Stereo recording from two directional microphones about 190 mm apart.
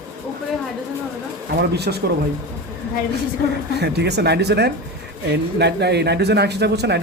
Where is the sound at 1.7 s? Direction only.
60° right (ahead or behind).